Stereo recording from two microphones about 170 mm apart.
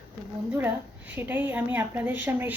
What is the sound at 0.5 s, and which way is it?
Speech, 10° right (ahead or behind).